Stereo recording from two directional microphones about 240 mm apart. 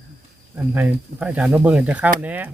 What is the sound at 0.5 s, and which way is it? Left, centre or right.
Speech, centre.